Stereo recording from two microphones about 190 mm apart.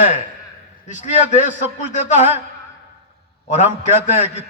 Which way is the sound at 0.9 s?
40° left (ahead or behind).